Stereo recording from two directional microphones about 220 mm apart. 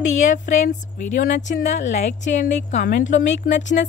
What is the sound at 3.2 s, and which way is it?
Speech, 55° left (ahead or behind).